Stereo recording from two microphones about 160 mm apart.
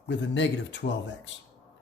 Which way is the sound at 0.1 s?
90° left.